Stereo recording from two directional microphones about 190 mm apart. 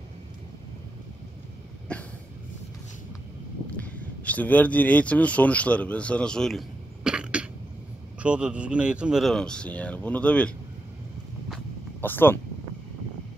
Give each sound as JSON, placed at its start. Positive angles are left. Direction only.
{"t": 1.9, "sound": "a sound", "side_deg": 5}
{"t": 3.7, "sound": "speech", "side_deg": 10}
{"t": 12.0, "sound": "speech", "side_deg": 10}